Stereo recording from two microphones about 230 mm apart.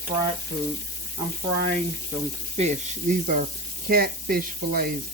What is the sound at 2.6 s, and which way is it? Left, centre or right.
Speech, right.